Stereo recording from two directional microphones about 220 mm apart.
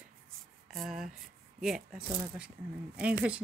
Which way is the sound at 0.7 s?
Centre (ahead or behind).